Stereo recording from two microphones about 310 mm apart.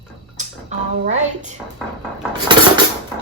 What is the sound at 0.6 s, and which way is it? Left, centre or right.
Music, right.